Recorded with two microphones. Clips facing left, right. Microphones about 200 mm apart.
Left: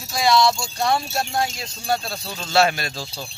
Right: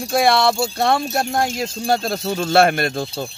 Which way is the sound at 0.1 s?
60° right (ahead or behind).